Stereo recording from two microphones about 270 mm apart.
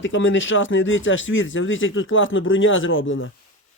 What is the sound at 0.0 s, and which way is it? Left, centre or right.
Speech, left.